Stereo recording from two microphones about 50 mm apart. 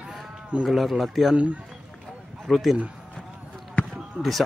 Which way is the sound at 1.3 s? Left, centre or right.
Right.